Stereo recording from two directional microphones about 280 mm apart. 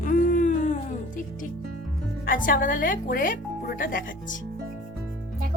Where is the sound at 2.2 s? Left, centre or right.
Left.